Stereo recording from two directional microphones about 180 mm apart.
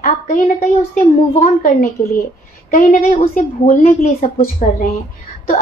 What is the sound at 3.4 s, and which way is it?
A woman's voice, 50° left (ahead or behind).